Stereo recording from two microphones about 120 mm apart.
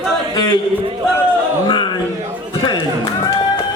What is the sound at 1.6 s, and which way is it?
Speech, 40° left (ahead or behind).